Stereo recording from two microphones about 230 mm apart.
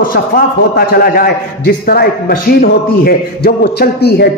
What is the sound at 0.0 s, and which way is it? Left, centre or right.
A man's voice, left.